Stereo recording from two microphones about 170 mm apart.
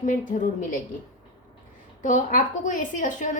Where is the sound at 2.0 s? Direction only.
50° left (ahead or behind).